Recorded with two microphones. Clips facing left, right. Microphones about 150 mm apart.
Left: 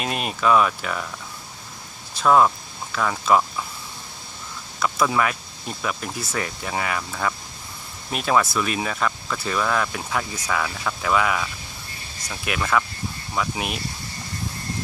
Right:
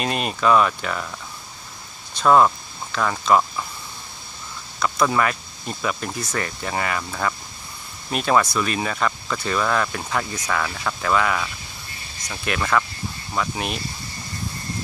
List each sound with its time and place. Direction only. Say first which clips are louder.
0.0 s speech: right 2 dB; 5° left (ahead or behind)
2.1 s speech: right 1 dB; centre (ahead or behind)
4.8 s speech: right 1 dB; 5° left (ahead or behind)